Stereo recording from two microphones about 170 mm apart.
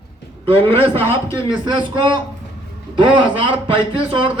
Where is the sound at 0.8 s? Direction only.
30° right (ahead or behind).